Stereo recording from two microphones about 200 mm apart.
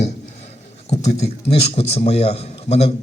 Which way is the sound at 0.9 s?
35° left (ahead or behind).